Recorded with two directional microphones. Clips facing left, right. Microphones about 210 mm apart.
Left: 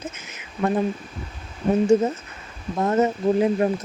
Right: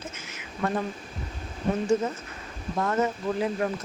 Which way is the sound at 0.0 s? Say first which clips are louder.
Left 4 dB; 20° left (ahead or behind).